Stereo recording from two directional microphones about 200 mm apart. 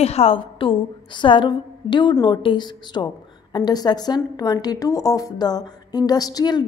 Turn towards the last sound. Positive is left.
turn(degrees=20)  # may be behind; listen again after turning